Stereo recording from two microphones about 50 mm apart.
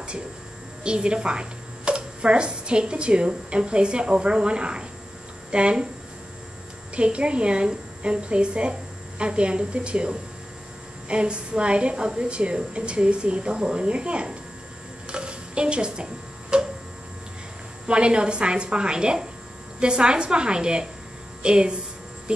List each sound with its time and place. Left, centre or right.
0.8 s a woman's voice: centre
7.0 s a woman's voice: right
15.0 s electric shaver: centre
17.8 s a woman's voice: right